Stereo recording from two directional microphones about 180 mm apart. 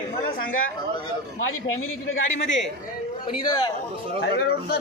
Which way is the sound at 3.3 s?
25° left (ahead or behind).